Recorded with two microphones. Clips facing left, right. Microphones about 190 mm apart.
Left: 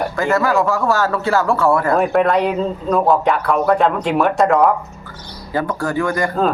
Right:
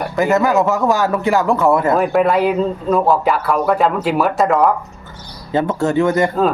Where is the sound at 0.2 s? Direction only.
20° right (ahead or behind).